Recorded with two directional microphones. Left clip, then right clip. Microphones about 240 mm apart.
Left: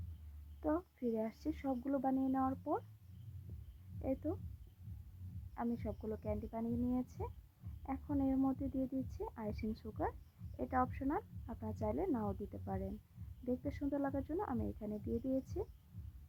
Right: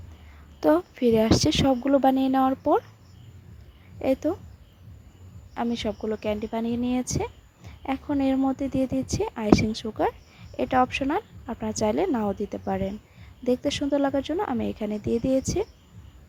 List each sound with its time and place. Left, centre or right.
0.6 s a woman's voice: right
4.0 s a woman's voice: right
5.5 s a woman's voice: right